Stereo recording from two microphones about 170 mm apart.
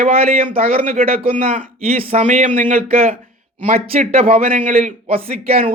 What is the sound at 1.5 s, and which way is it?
Speech, 50° right (ahead or behind).